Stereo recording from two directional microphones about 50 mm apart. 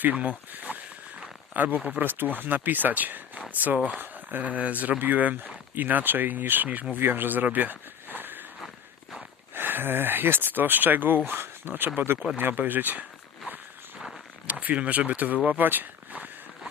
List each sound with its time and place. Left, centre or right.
0.0 s speech: right
9.6 s speech: right
14.4 s speech: right